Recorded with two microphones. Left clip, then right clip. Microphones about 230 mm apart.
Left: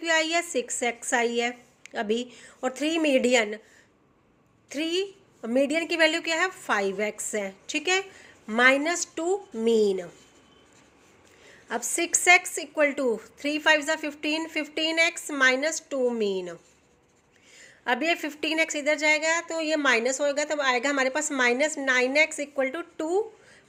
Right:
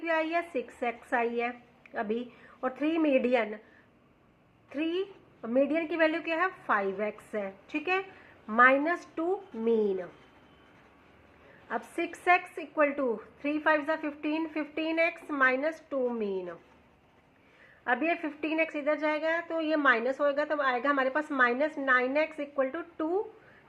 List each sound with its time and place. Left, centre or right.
0.0 s a woman's voice: left
4.7 s a woman's voice: left
11.7 s a woman's voice: left
17.8 s a woman's voice: left
18.9 s a woman's voice: left